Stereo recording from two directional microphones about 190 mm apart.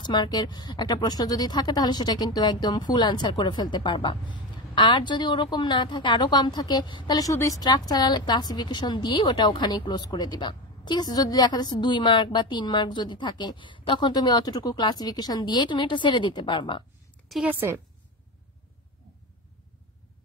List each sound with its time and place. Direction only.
0.0 s speech: 25° left (ahead or behind)
17.3 s a woman's voice: 5° right (ahead or behind)